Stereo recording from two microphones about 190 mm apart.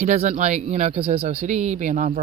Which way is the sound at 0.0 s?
35° right (ahead or behind).